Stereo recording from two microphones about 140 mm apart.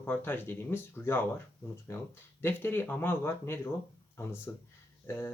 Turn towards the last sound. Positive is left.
turn(degrees=20)  # may be behind; listen again after turning